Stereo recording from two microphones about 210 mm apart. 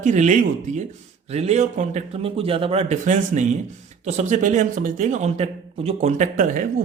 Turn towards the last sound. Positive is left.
turn(degrees=-40)  # may be behind; listen again after turning